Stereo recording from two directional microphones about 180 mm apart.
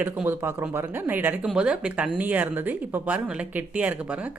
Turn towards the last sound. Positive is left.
turn(degrees=-10)  # may be behind; listen again after turning